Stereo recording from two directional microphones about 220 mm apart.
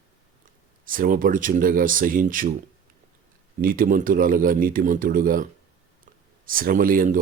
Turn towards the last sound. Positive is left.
turn(degrees=-40)  # may be behind; listen again after turning